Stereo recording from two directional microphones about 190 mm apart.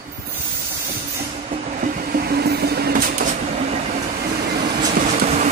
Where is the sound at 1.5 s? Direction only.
40° right (ahead or behind).